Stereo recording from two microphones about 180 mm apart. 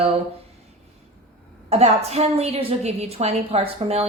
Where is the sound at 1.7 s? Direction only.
35° right (ahead or behind).